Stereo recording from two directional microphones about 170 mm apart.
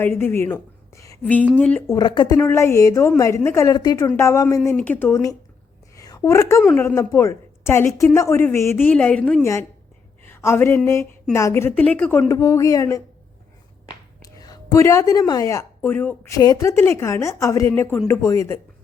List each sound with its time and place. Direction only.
0.0 s a woman's voice: 15° left (ahead or behind)
2.0 s speech: 25° left (ahead or behind)
2.4 s a woman's voice: 15° left (ahead or behind)
6.0 s a sound: 20° left (ahead or behind)
6.6 s speech: 5° left (ahead or behind)
6.8 s a woman's voice: 15° left (ahead or behind)
14.3 s a woman's voice: 20° left (ahead or behind)